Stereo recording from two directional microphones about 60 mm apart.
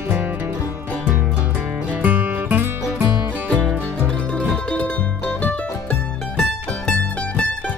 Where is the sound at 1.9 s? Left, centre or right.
Right.